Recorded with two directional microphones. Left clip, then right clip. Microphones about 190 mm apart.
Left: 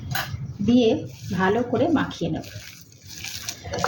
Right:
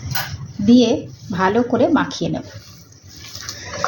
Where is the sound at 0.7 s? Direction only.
35° right (ahead or behind).